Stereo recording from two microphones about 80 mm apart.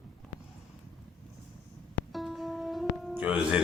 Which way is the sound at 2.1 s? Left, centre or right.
Centre.